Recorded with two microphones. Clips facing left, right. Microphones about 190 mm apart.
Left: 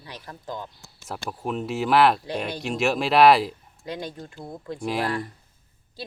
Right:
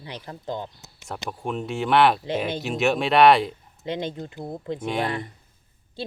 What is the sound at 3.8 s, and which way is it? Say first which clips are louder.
Speech: right 4 dB; 25° right (ahead or behind).